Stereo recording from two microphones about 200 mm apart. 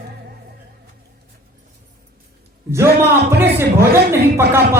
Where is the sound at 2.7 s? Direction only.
15° right (ahead or behind).